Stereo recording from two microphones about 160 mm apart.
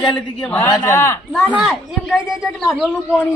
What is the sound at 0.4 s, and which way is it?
Speech, 10° left (ahead or behind).